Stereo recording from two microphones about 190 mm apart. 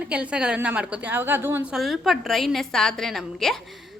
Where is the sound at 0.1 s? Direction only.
5° right (ahead or behind).